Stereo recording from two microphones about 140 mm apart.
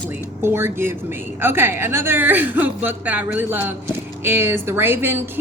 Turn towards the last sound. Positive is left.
turn(degrees=-15)  # may be behind; listen again after turning